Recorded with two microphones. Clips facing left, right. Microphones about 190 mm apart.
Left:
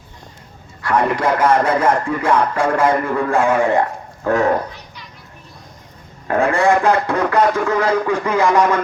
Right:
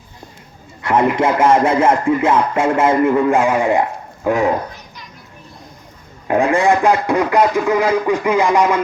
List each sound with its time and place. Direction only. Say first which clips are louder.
0.8 s music: right 3 dB; 20° right (ahead or behind)
6.2 s speech: right 1 dB; 15° right (ahead or behind)